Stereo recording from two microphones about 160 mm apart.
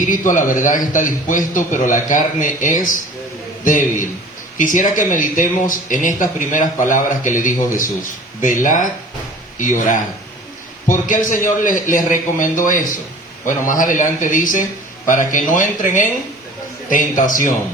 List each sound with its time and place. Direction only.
0.0 s speech: 55° left (ahead or behind)